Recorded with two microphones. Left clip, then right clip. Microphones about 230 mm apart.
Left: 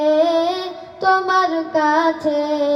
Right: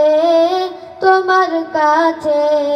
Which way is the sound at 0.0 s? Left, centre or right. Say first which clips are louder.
Right 5 dB; left.